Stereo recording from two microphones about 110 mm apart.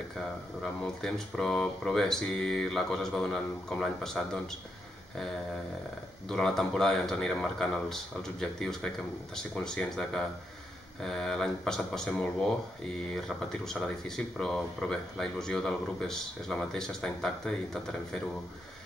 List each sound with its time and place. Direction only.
0.8 s speech: 5° left (ahead or behind)
6.2 s speech: 5° left (ahead or behind)